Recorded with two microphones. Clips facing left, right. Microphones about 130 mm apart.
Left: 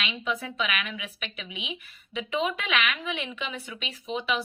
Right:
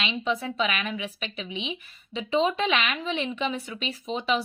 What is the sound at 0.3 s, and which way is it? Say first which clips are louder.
Speech: right 3 dB; 30° right (ahead or behind).